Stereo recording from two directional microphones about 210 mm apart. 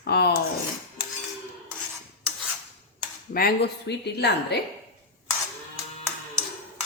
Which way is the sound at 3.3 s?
45° left (ahead or behind).